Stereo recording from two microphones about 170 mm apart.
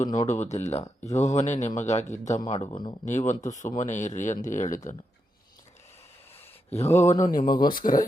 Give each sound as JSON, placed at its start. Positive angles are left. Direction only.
{"t": 0.0, "sound": "a man's voice", "side_deg": 40}
{"t": 2.4, "sound": "speech", "side_deg": 30}
{"t": 3.1, "sound": "speech", "side_deg": 45}
{"t": 6.7, "sound": "a sound", "side_deg": 40}
{"t": 7.1, "sound": "speech", "side_deg": 50}